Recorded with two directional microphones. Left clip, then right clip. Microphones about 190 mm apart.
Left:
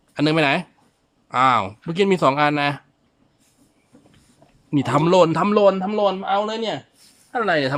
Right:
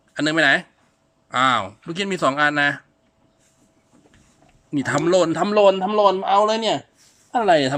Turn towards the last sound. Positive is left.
turn(degrees=-5)  # may be behind; listen again after turning